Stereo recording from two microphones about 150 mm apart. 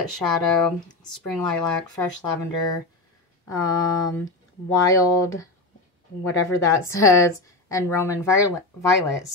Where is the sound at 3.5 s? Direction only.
25° left (ahead or behind).